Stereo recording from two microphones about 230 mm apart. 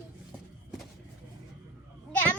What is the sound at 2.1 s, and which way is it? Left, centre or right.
Children playing, centre.